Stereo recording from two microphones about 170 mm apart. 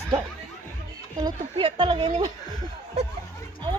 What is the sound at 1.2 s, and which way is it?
A woman's voice, 30° right (ahead or behind).